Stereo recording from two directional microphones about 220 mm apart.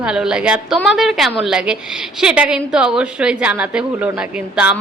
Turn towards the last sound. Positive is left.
turn(degrees=-5)  # may be behind; listen again after turning